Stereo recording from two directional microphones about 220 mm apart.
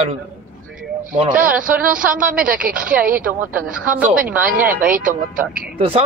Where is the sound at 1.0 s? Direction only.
35° right (ahead or behind).